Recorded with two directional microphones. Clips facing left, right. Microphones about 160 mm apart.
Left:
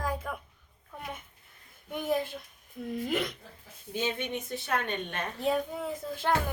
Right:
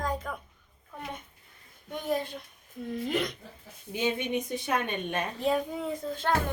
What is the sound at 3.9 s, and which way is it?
Speech, 15° right (ahead or behind).